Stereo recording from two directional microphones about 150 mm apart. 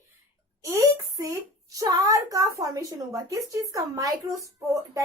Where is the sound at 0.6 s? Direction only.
20° right (ahead or behind).